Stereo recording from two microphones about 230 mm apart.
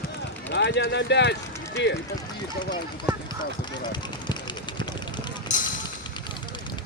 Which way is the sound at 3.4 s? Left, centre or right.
Centre.